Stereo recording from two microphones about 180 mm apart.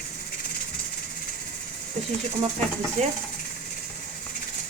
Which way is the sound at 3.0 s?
40° right (ahead or behind).